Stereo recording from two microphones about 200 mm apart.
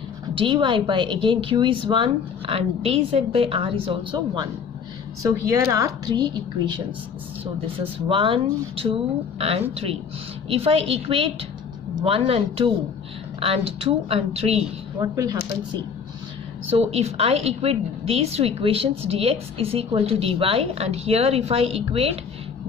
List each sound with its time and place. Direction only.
0.3 s a woman's voice: 25° right (ahead or behind)
5.2 s a woman's voice: 15° right (ahead or behind)
8.1 s a woman's voice: 25° right (ahead or behind)
15.0 s a woman's voice: 20° right (ahead or behind)
16.7 s a woman's voice: 30° right (ahead or behind)